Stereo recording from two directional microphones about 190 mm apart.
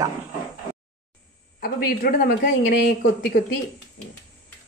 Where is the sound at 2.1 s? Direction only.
50° left (ahead or behind).